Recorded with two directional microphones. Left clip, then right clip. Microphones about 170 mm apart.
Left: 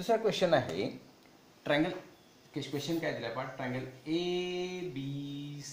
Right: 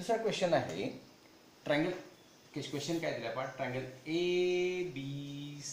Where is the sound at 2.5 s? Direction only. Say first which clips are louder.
Left 2 dB; 35° left (ahead or behind).